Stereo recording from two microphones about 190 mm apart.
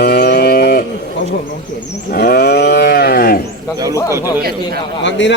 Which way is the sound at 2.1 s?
55° left (ahead or behind).